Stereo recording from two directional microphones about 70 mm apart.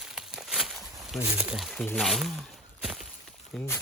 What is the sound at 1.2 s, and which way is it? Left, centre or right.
Speech, right.